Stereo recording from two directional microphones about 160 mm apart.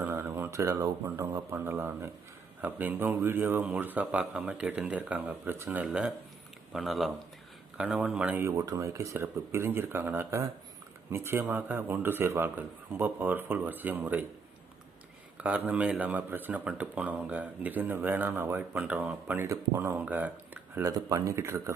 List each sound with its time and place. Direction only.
0.0 s speech: 15° right (ahead or behind)
15.4 s speech: 10° right (ahead or behind)